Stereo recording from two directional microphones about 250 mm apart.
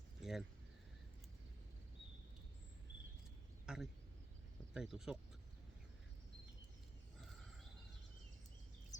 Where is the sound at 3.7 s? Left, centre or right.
Centre.